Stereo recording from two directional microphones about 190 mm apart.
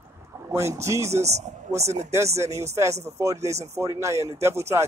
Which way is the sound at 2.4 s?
15° right (ahead or behind).